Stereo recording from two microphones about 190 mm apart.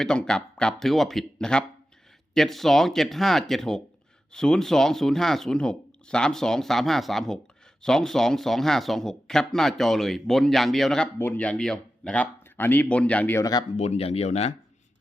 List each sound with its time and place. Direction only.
0.0 s speech: 5° left (ahead or behind); by 13.7 s 20° left (ahead or behind)
13.7 s speech: 35° left (ahead or behind)